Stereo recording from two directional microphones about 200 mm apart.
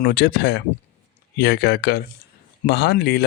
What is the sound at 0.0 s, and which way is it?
Speech, 55° left (ahead or behind).